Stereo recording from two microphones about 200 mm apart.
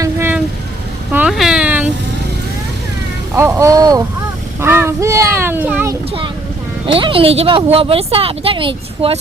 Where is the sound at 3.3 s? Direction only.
15° right (ahead or behind).